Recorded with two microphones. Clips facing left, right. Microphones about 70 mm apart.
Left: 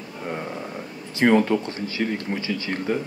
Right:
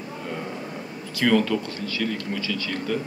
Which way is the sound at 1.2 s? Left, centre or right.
Left.